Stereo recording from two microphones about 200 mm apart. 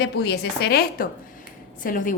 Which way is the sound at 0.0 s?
55° left (ahead or behind).